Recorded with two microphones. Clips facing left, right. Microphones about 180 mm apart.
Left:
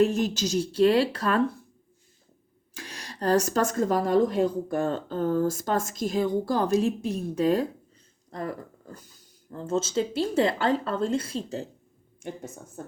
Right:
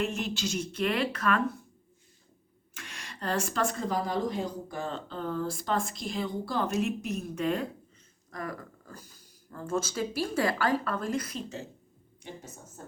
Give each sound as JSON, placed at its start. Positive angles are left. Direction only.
{"t": 0.0, "sound": "speech", "side_deg": 40}
{"t": 2.7, "sound": "speech", "side_deg": 35}
{"t": 12.2, "sound": "a woman's voice", "side_deg": 55}